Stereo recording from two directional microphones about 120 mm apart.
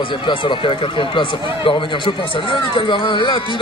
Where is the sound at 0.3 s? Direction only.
40° left (ahead or behind).